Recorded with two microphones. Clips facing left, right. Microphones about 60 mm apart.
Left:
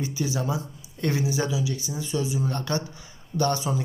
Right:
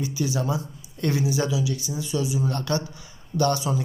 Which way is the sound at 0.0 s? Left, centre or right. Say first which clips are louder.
Right 2 dB; left.